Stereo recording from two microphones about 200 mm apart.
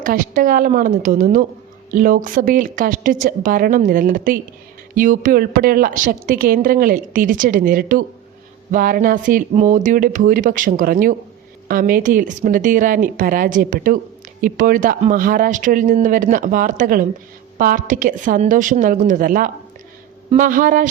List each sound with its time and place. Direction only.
0.0 s a woman's voice: 45° right (ahead or behind)